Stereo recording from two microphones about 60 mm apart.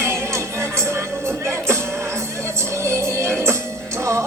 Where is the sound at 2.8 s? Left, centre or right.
Right.